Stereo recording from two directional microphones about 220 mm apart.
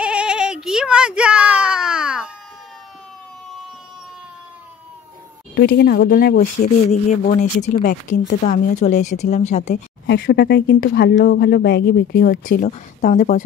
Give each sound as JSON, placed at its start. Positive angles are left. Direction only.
{"t": 0.0, "sound": "a sound", "side_deg": -5}
{"t": 5.5, "sound": "speech", "side_deg": 50}
{"t": 6.9, "sound": "speech", "side_deg": 35}
{"t": 10.0, "sound": "speech", "side_deg": 45}